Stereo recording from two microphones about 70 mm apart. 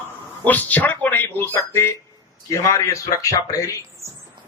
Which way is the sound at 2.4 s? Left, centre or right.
Left.